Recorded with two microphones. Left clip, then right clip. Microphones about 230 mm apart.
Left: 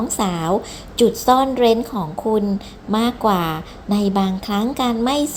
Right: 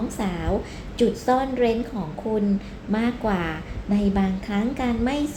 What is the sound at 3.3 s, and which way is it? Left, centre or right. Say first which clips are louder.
A woman's voice: left 7 dB; left.